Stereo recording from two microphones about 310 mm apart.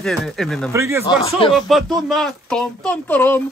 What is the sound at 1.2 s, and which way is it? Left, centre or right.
Speech, centre.